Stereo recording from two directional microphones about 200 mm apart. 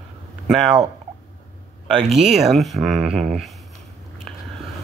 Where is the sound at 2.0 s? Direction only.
Centre (ahead or behind).